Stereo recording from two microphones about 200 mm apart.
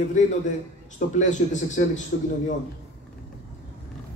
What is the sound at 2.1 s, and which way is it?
Speech, 50° left (ahead or behind).